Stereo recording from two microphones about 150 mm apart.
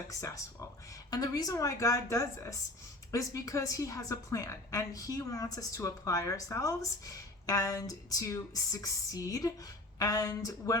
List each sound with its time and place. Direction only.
0.1 s a woman's voice: 20° left (ahead or behind)